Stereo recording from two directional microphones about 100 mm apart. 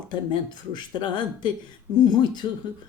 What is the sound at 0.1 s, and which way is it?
Speech, 50° left (ahead or behind).